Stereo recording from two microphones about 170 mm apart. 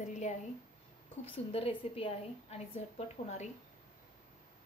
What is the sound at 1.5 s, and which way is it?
A woman's voice, 30° left (ahead or behind).